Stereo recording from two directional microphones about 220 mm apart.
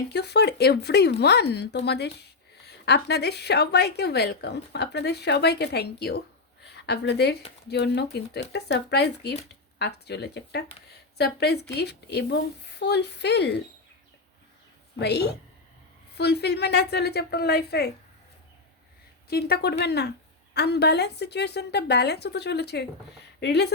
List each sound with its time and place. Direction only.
0.1 s a woman's voice: 50° left (ahead or behind)
14.9 s a woman's voice: 50° left (ahead or behind)
19.3 s a woman's voice: 45° left (ahead or behind)